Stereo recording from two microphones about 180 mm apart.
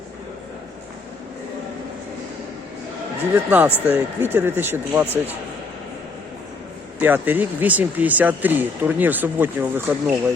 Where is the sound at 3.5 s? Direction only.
10° right (ahead or behind).